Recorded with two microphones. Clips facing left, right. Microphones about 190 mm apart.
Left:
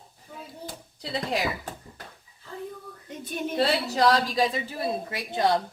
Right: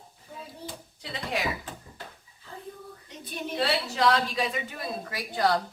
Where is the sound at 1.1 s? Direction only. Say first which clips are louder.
Left 3 dB; 35° left (ahead or behind).